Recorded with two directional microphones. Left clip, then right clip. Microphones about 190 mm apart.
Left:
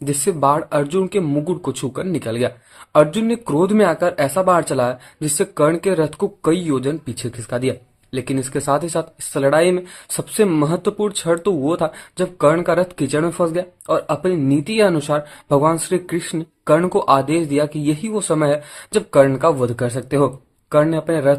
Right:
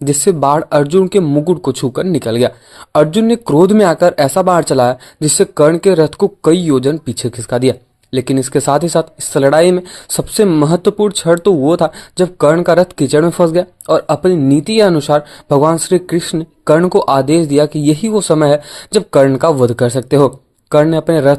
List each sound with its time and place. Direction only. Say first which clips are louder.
0.0 s speech: right 6 dB; 35° right (ahead or behind)